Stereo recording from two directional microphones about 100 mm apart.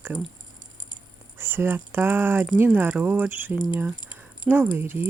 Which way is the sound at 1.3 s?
20° right (ahead or behind).